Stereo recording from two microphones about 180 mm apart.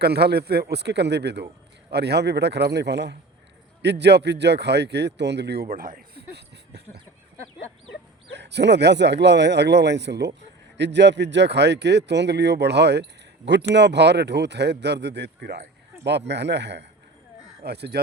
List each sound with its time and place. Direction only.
0.0 s speech: 65° right (ahead or behind)
8.4 s speech: 70° right (ahead or behind)